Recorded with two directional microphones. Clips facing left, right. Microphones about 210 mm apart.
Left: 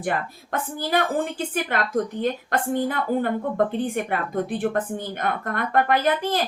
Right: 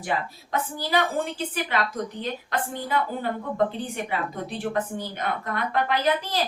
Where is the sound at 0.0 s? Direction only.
50° left (ahead or behind).